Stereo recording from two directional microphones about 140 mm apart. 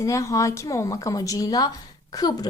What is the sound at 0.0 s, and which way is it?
A woman's voice, 25° left (ahead or behind).